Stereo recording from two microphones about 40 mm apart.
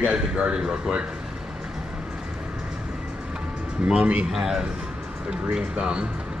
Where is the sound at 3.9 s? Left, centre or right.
Right.